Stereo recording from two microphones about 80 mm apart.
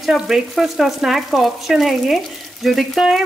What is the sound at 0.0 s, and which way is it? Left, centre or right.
Speech, centre.